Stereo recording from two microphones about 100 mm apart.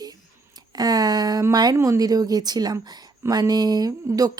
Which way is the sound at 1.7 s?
30° right (ahead or behind).